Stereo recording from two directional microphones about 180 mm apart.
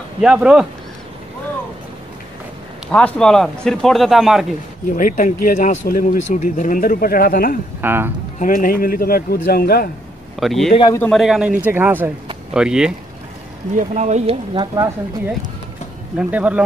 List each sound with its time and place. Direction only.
0.2 s speech: 5° right (ahead or behind)
2.9 s speech: 5° left (ahead or behind)
4.9 s speech: 45° left (ahead or behind)
7.8 s speech: 10° right (ahead or behind)
8.4 s speech: 45° left (ahead or behind)
10.4 s speech: centre (ahead or behind)
10.7 s speech: 25° left (ahead or behind)
11.0 s speech: centre (ahead or behind)
13.7 s speech: 40° right (ahead or behind)
16.2 s speech: 5° right (ahead or behind)